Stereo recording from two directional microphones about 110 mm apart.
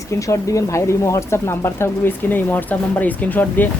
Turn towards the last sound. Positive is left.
turn(degrees=15)  # may be behind; listen again after turning